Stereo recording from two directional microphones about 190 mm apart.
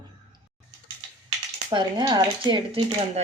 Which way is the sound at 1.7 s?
25° right (ahead or behind).